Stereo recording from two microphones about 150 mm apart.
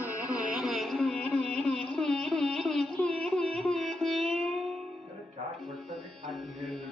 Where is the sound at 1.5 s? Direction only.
5° left (ahead or behind).